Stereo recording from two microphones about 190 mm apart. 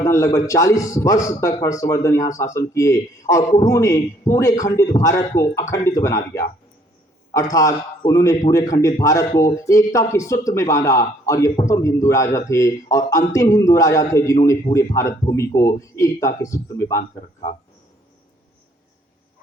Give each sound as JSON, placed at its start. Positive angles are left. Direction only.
{"t": 0.0, "sound": "a man's voice", "side_deg": 15}